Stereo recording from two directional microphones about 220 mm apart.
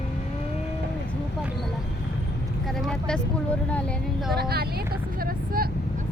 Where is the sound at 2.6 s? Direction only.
Centre (ahead or behind).